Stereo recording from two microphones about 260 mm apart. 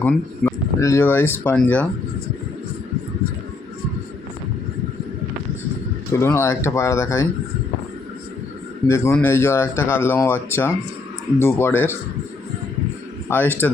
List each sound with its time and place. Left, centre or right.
0.0 s speech: centre
6.1 s speech: centre
8.9 s speech: centre
13.3 s speech: centre